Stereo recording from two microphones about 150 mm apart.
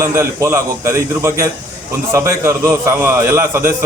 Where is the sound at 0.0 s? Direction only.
15° right (ahead or behind).